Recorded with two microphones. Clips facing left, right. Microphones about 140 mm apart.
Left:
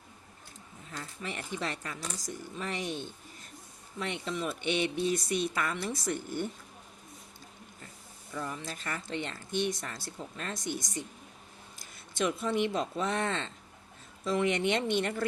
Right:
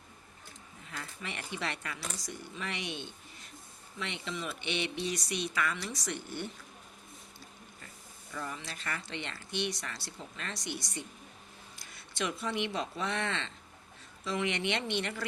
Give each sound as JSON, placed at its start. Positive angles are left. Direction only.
{"t": 0.9, "sound": "speech", "side_deg": 40}
{"t": 8.4, "sound": "speech", "side_deg": 45}